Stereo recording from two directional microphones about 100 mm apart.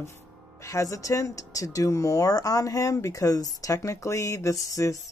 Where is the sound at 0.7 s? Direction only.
30° left (ahead or behind).